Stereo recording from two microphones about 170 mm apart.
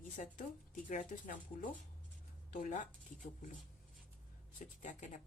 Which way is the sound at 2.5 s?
50° left (ahead or behind).